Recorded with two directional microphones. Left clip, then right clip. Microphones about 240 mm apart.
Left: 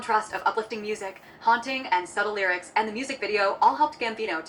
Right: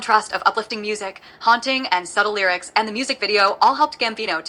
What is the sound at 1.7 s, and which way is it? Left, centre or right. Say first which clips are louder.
Speech: right 9 dB; centre.